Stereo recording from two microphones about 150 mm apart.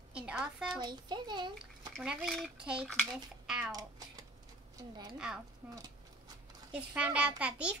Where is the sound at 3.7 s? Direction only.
25° right (ahead or behind).